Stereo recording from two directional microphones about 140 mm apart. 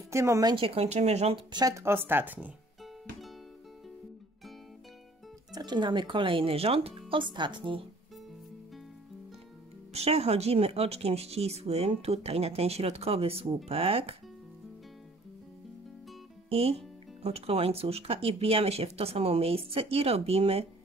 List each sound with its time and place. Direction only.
0.1 s a woman's voice: 20° right (ahead or behind)
0.6 s speech: 45° right (ahead or behind)
1.5 s speech: 25° right (ahead or behind)
5.5 s speech: 30° right (ahead or behind)
9.9 s speech: 45° right (ahead or behind)
16.4 s speech: 45° right (ahead or behind)